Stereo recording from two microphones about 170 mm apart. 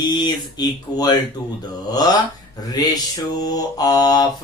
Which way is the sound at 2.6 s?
20° left (ahead or behind).